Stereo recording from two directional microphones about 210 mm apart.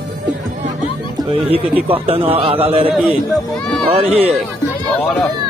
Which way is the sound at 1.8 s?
25° right (ahead or behind).